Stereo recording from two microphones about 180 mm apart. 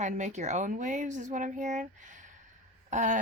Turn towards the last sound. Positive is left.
turn(degrees=-45)  # may be behind; listen again after turning